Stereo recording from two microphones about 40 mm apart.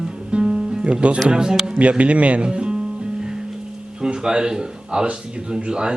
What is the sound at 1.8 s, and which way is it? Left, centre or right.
Speech, right.